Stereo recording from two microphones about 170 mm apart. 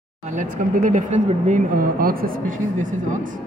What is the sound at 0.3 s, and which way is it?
Speech, 50° right (ahead or behind).